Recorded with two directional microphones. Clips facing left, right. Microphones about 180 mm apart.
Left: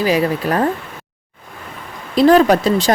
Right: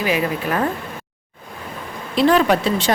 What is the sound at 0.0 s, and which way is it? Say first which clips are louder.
Speech: left 4 dB; 35° left (ahead or behind).